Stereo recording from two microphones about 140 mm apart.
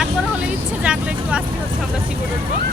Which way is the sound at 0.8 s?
10° right (ahead or behind).